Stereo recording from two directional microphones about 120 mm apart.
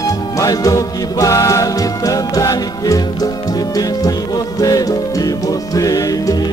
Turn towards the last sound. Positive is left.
turn(degrees=30)  # may be behind; listen again after turning